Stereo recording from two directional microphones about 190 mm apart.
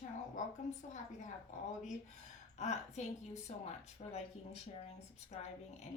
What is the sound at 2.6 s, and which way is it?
Speech, 35° left (ahead or behind).